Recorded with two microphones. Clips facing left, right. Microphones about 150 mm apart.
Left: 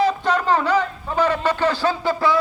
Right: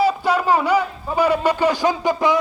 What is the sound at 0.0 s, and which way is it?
A man's voice, 10° right (ahead or behind).